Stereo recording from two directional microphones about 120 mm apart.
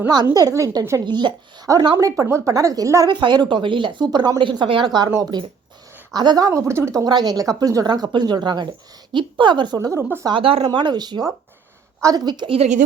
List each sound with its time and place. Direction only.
0.3 s speech: 30° right (ahead or behind)
3.1 s speech: 40° right (ahead or behind)
5.0 s speech: 20° right (ahead or behind)
6.1 s speech: 35° right (ahead or behind)
10.2 s speech: 50° right (ahead or behind)
12.5 s speech: 75° right (ahead or behind)